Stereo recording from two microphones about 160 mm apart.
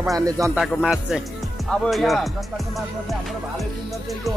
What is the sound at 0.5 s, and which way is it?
A man's voice, 5° right (ahead or behind).